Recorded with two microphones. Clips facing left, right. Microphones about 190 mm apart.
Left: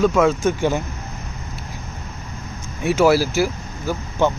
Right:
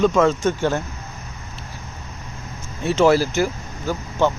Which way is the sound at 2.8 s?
10° left (ahead or behind).